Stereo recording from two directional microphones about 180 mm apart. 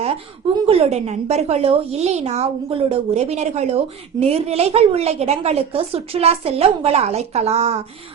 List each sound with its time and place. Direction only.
0.7 s a woman's voice: 35° right (ahead or behind)